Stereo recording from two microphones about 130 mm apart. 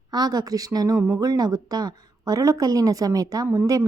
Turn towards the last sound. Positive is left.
turn(degrees=-25)  # may be behind; listen again after turning